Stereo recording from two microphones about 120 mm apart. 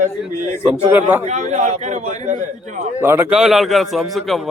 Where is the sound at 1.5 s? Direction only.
80° right.